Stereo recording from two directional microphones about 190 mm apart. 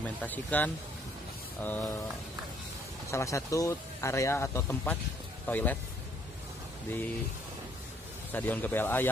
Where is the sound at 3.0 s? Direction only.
15° left (ahead or behind).